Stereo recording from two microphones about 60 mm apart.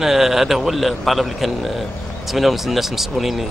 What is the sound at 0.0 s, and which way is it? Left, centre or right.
Speech, centre.